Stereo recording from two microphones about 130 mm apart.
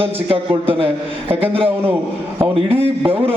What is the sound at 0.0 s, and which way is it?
A man's voice, 45° right (ahead or behind).